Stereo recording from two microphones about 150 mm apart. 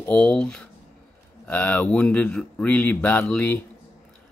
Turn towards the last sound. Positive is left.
turn(degrees=10)  # may be behind; listen again after turning